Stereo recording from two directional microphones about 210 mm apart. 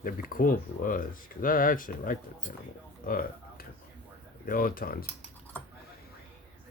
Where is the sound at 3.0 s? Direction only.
40° left (ahead or behind).